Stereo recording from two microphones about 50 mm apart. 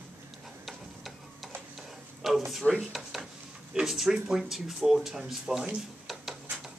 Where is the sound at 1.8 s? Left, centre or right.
Centre.